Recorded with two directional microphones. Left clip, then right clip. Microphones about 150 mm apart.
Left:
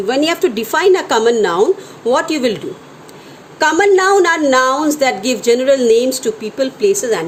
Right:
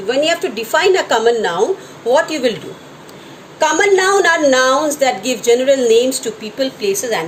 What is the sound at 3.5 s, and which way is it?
A woman's voice, 90° left.